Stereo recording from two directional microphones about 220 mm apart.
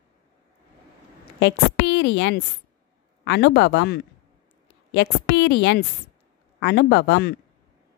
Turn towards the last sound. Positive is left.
turn(degrees=50)  # may be behind; listen again after turning